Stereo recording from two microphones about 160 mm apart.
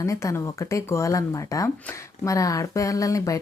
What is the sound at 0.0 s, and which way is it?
Speech, 20° left (ahead or behind).